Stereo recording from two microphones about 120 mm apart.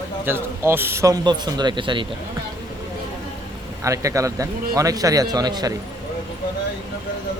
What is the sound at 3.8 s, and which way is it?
A man's voice, 25° right (ahead or behind).